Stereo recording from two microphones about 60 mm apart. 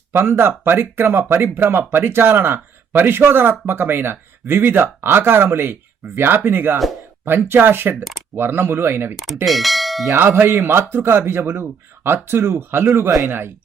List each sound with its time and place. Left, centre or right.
0.1 s speech: right
9.1 s a sound: centre
10.2 s speech: right